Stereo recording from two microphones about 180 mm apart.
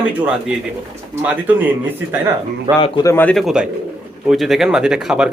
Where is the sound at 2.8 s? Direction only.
25° left (ahead or behind).